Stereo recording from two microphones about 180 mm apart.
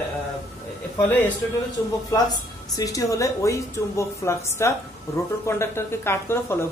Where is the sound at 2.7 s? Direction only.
20° left (ahead or behind).